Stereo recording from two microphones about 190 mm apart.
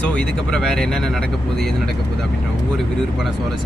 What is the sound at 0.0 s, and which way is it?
Speech, 5° left (ahead or behind).